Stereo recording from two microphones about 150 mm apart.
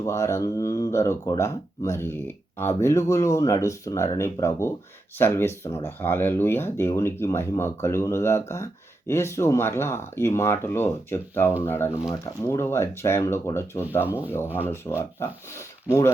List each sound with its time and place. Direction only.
0.0 s speech: 20° left (ahead or behind)